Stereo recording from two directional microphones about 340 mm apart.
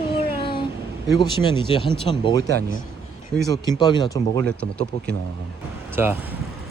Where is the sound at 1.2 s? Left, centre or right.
Centre.